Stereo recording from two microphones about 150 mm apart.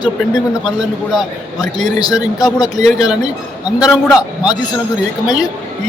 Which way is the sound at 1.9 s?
25° left (ahead or behind).